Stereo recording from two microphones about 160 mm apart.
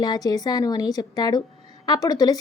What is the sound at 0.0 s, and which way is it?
A woman's voice, 25° left (ahead or behind).